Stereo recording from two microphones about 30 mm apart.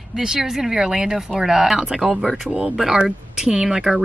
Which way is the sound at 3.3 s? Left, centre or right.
Centre.